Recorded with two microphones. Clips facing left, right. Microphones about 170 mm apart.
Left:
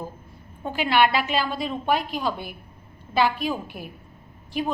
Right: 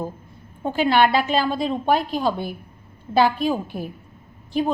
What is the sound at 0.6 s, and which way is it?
A woman's voice, 40° right (ahead or behind).